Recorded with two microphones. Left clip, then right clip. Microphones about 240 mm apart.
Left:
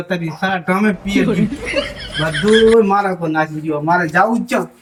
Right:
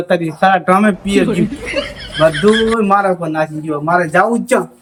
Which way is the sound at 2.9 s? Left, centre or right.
Right.